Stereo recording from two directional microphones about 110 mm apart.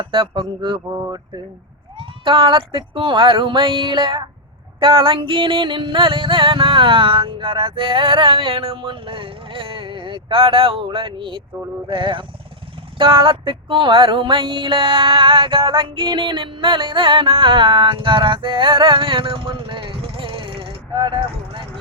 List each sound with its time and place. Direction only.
0.0 s music: 50° right (ahead or behind)
0.9 s a sound: 30° right (ahead or behind)
2.0 s music: 50° right (ahead or behind)